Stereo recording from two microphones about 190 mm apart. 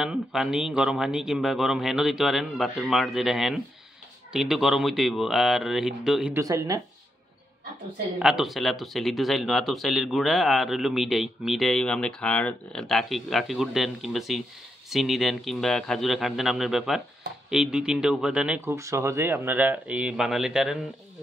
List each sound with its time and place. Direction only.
0.0 s speech: 5° right (ahead or behind)
6.3 s speech: 20° right (ahead or behind)
8.2 s speech: 5° right (ahead or behind)